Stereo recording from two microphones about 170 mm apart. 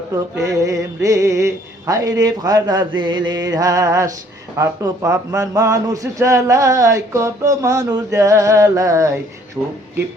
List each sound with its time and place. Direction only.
0.3 s a man's voice: 20° right (ahead or behind)